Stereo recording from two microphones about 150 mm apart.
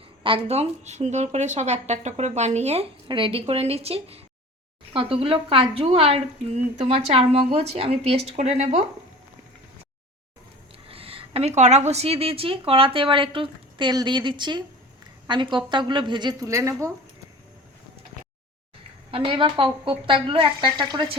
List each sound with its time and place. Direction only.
0.2 s a woman's voice: 35° right (ahead or behind)
10.8 s a woman's voice: 40° right (ahead or behind); by 16.9 s 20° right (ahead or behind)
19.1 s a woman's voice: 35° right (ahead or behind)